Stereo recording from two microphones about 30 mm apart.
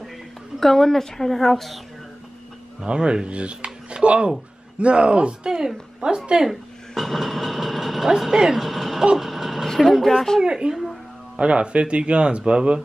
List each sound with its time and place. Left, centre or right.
0.6 s a woman's voice: centre
2.8 s speech: right
5.9 s speech: right
7.0 s train: centre
8.3 s a woman's voice: centre
8.5 s a sound: centre
9.2 s vehicle: centre
9.8 s speech: centre
10.4 s a woman's voice: right
11.3 s speech: right